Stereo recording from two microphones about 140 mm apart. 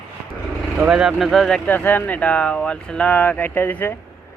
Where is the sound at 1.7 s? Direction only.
10° left (ahead or behind).